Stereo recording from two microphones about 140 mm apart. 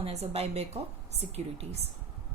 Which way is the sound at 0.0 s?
50° right (ahead or behind).